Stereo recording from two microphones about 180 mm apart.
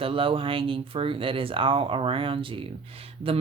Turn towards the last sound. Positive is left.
turn(degrees=-30)  # may be behind; listen again after turning